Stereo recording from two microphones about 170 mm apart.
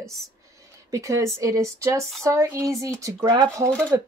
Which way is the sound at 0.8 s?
20° right (ahead or behind).